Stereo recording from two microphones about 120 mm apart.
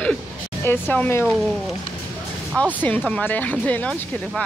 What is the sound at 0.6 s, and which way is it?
Speech, 15° left (ahead or behind).